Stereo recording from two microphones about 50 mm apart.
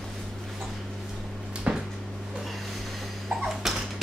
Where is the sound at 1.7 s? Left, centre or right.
Right.